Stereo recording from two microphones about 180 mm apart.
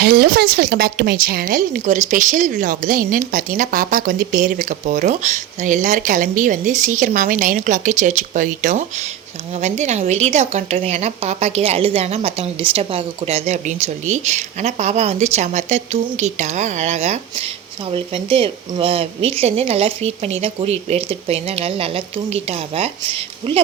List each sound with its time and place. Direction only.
0.0 s a woman's voice: 60° right (ahead or behind); by 23.6 s 30° right (ahead or behind)